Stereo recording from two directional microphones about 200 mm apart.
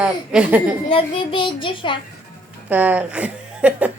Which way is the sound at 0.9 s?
25° left (ahead or behind).